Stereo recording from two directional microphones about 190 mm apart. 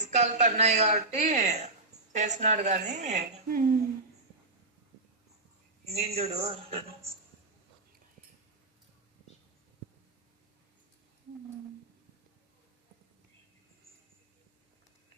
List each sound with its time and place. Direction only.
0.0 s speech: 35° right (ahead or behind)
5.9 s speech: 35° right (ahead or behind)